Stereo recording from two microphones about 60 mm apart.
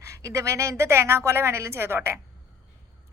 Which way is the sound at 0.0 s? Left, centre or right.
Right.